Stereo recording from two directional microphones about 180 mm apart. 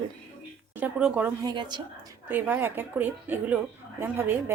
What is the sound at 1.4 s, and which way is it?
Speech, 25° right (ahead or behind).